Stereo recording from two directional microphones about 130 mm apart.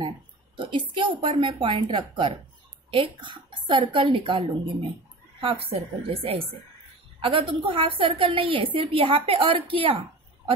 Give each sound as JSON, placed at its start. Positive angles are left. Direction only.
{"t": 0.6, "sound": "a woman's voice", "side_deg": -40}